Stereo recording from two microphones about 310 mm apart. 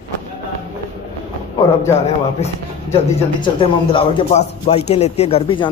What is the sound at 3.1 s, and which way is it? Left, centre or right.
Speech, centre.